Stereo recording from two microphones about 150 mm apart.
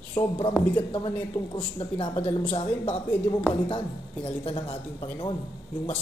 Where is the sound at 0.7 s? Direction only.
35° left (ahead or behind).